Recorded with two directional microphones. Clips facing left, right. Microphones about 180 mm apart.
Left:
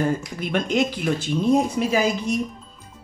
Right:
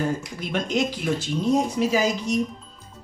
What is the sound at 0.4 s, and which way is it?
Speech, 55° left (ahead or behind).